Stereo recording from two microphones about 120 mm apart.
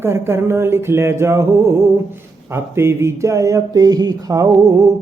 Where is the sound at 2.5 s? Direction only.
20° right (ahead or behind).